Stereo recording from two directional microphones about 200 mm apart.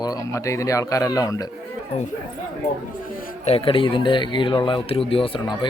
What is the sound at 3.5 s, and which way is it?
Speech, 25° left (ahead or behind).